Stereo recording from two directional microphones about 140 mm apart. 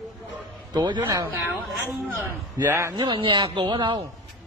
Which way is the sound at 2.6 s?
20° right (ahead or behind).